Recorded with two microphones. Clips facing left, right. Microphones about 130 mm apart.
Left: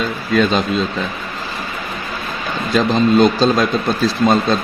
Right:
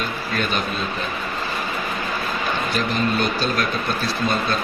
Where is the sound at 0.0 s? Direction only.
90° left.